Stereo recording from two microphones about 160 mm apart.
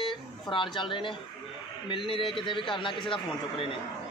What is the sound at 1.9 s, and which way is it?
A man's voice, 30° left (ahead or behind).